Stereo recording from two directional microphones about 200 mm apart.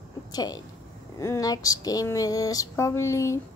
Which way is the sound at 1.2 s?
15° left (ahead or behind).